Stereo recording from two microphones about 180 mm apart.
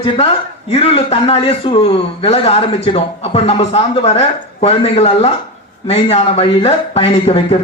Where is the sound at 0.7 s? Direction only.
35° left (ahead or behind).